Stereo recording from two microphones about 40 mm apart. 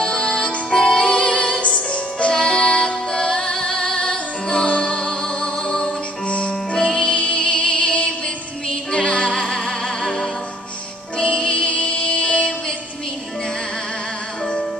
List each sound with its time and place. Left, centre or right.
0.0 s music: centre
6.2 s music: left
6.7 s music: centre
9.4 s music: centre
11.1 s music: left